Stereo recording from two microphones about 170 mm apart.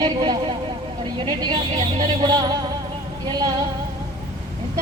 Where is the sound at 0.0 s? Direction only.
30° right (ahead or behind).